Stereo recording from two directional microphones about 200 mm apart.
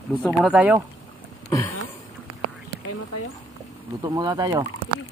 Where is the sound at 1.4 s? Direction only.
15° left (ahead or behind).